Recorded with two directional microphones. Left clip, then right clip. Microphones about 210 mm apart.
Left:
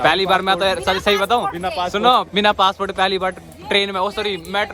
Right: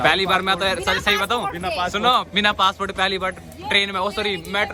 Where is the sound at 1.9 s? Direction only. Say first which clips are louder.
Left 4 dB; 25° left (ahead or behind).